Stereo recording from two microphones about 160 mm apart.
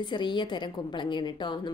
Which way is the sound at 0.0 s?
30° left (ahead or behind).